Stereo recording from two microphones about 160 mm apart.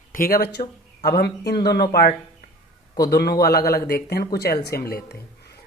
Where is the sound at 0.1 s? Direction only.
70° left (ahead or behind).